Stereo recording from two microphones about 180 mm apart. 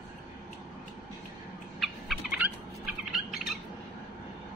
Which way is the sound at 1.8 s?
5° right (ahead or behind).